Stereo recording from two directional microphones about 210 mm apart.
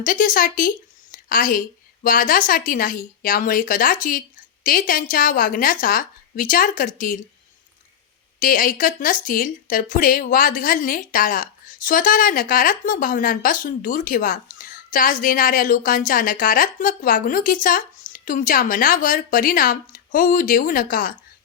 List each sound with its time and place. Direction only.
0.0 s speech: 40° left (ahead or behind)
1.1 s a sound: 40° left (ahead or behind)
2.0 s speech: 40° left (ahead or behind)
8.4 s speech: 40° left (ahead or behind)